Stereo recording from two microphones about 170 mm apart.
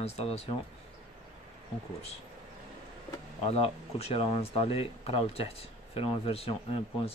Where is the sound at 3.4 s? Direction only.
35° left (ahead or behind).